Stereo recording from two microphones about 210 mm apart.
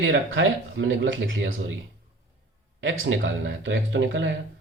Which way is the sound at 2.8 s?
65° right (ahead or behind).